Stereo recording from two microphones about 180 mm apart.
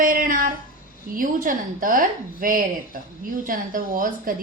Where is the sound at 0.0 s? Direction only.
50° right (ahead or behind).